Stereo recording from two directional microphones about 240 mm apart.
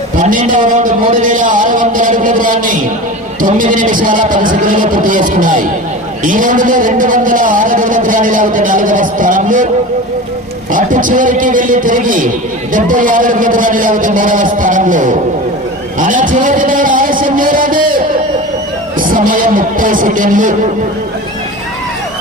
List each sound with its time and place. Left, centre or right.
0.2 s a man's voice: right
10.7 s a man's voice: right
16.0 s a sound: right
18.9 s speech: right